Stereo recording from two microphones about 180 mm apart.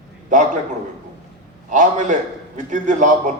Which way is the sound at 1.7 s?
45° right (ahead or behind).